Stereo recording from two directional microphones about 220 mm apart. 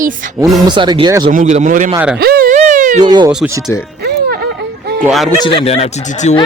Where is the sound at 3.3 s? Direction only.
5° right (ahead or behind).